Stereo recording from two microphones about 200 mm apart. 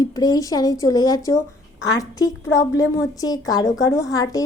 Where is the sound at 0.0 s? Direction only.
20° left (ahead or behind).